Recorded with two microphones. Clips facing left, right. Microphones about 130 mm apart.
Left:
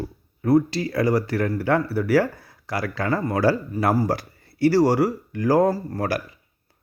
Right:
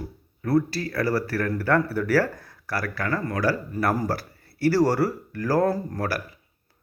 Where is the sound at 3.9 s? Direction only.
10° left (ahead or behind).